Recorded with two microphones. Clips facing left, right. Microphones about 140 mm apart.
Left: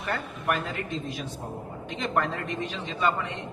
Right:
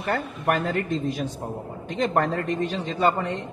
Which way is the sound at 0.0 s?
45° right (ahead or behind).